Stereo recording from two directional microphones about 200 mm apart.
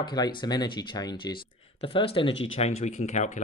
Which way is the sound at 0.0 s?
20° left (ahead or behind).